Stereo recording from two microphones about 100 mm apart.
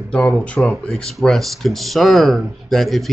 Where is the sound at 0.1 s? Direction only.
10° left (ahead or behind).